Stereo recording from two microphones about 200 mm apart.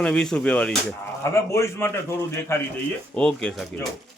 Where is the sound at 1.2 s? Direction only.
15° left (ahead or behind).